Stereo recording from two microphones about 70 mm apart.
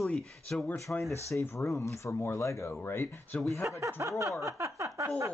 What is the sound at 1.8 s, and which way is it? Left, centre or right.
Speech, left.